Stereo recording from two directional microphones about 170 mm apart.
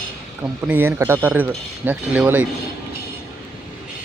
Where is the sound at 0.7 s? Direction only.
10° right (ahead or behind).